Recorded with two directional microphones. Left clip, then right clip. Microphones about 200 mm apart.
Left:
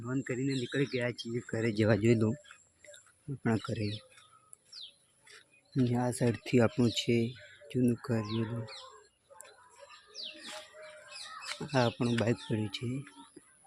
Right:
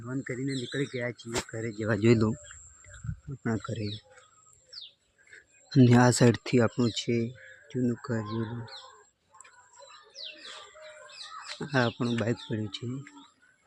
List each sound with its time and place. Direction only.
0.0 s speech: centre (ahead or behind)
1.6 s speech: 45° left (ahead or behind)
2.0 s speech: 15° right (ahead or behind)
3.4 s speech: centre (ahead or behind)
5.7 s speech: 35° right (ahead or behind)
6.4 s speech: 15° right (ahead or behind)
11.6 s speech: 15° right (ahead or behind)
12.2 s speech: 5° right (ahead or behind)